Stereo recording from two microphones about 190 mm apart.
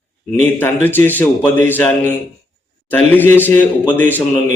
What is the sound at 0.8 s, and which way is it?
A man's voice, 10° left (ahead or behind).